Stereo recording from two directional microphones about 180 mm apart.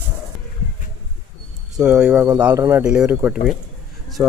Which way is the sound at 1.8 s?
5° right (ahead or behind).